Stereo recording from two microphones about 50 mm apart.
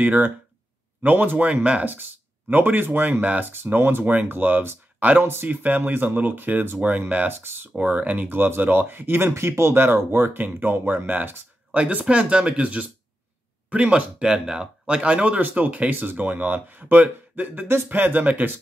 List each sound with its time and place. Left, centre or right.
0.0 s speech: right
2.5 s speech: right
5.2 s speech: right
5.5 s speech: right
7.1 s speech: right
7.3 s speech: right
7.8 s speech: right
9.4 s speech: right
11.7 s speech: right